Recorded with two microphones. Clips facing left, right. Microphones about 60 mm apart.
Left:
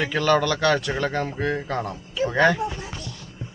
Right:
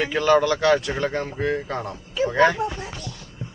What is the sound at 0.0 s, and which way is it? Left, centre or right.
Speech, centre.